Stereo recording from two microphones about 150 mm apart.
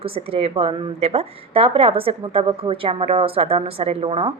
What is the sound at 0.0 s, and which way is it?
A woman's voice, 40° right (ahead or behind).